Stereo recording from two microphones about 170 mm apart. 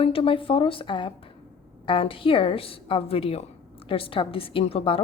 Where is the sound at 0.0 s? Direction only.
35° left (ahead or behind).